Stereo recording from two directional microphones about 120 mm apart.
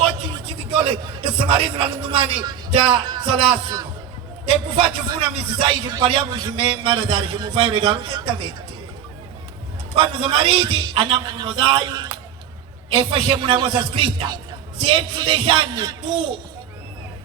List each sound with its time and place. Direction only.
0.7 s a man's voice: 45° right (ahead or behind)
5.3 s a man's voice: 50° right (ahead or behind)
9.9 s a man's voice: 45° right (ahead or behind)